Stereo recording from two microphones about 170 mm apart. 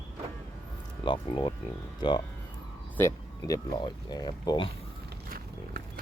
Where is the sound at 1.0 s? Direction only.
30° left (ahead or behind).